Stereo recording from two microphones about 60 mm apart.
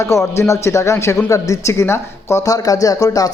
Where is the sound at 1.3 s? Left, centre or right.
Left.